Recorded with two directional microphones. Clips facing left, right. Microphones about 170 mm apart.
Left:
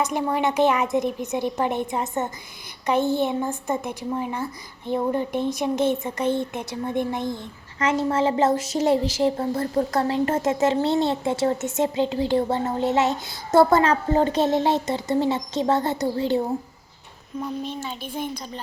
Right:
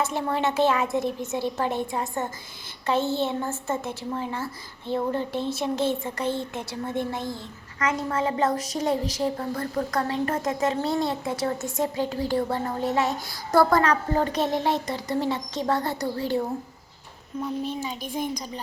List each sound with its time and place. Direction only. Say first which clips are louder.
0.0 s a woman's voice: left 2 dB; 15° left (ahead or behind)
17.4 s a child's voice: right 1 dB; 5° right (ahead or behind)